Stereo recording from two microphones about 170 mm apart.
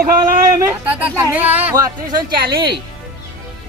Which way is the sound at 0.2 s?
15° right (ahead or behind).